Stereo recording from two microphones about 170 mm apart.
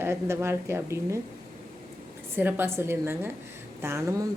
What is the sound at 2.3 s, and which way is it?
Speech, 10° right (ahead or behind).